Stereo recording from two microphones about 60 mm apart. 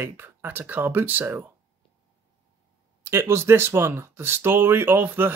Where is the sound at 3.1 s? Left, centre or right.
Right.